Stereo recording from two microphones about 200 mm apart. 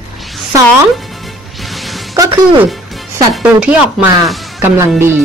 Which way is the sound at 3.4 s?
5° right (ahead or behind).